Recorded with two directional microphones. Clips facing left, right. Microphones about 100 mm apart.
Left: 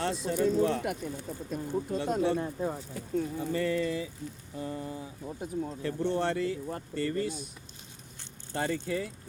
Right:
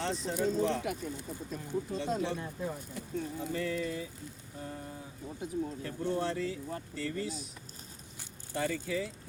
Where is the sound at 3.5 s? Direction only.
80° left.